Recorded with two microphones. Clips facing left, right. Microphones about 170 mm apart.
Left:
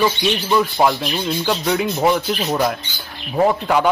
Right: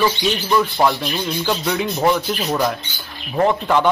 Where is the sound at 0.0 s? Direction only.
10° left (ahead or behind).